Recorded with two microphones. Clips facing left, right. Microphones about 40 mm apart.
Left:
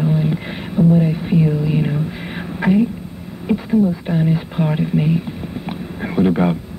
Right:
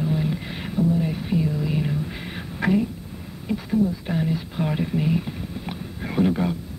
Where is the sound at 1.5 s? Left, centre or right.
Left.